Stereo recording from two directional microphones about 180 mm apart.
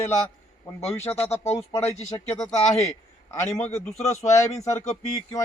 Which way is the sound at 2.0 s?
35° left (ahead or behind).